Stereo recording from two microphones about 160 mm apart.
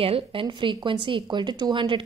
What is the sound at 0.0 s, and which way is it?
A woman's voice, 35° right (ahead or behind).